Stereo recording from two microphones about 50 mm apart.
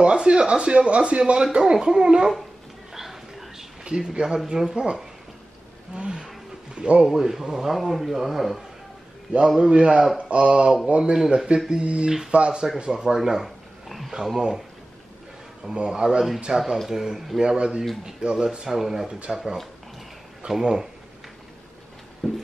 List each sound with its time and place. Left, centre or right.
0.0 s speech: centre
2.9 s a sound: centre
3.8 s speech: centre
5.9 s a sound: centre
7.1 s speech: centre
9.6 s a man's voice: right
11.1 s speech: centre
11.7 s a man's voice: right
15.7 s speech: centre
22.2 s music: centre